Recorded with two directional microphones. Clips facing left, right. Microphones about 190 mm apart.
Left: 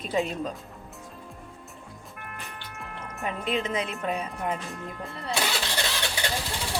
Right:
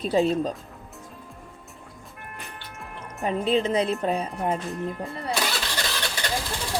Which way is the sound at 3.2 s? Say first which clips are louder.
Right 6 dB; 35° right (ahead or behind).